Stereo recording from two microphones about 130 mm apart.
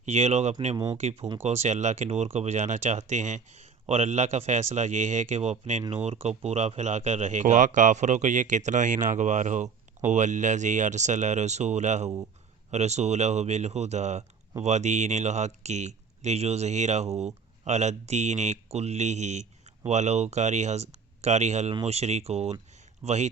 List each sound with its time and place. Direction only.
0.0 s speech: 60° right (ahead or behind)